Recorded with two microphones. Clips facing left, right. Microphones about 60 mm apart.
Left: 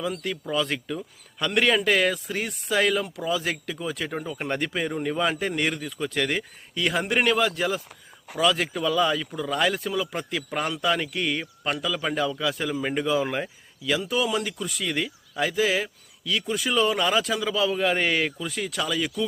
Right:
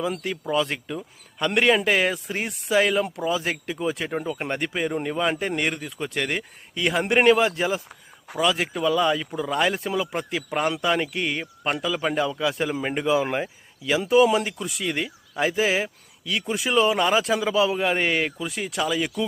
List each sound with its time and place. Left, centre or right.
0.0 s speech: centre
1.4 s speech: right
7.2 s speech: right; by 9.1 s centre
9.1 s speech: centre
11.6 s speech: right